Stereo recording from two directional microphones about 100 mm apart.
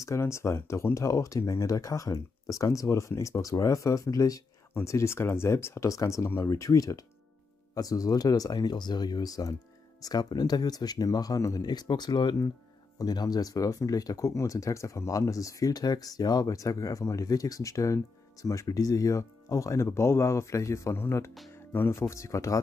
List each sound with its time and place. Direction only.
0.0 s speech: 30° left (ahead or behind)